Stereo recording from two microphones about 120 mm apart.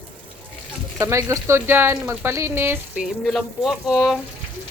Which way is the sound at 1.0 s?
25° right (ahead or behind).